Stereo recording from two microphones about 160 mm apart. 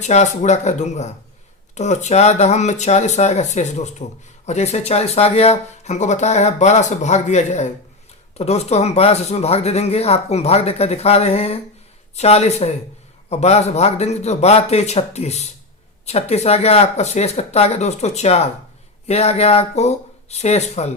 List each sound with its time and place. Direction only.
0.0 s speech: 45° left (ahead or behind)